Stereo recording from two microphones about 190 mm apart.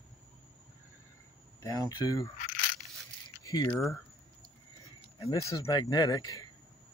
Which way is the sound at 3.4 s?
20° left (ahead or behind).